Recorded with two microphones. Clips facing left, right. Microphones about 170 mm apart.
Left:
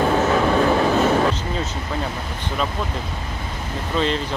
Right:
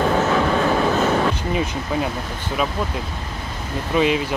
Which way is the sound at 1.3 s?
15° right (ahead or behind).